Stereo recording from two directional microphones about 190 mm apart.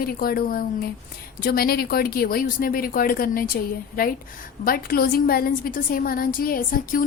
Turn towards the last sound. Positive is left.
turn(degrees=45)  # may be behind; listen again after turning